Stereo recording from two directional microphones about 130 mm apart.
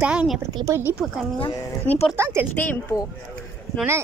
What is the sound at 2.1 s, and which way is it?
Speech, 20° right (ahead or behind).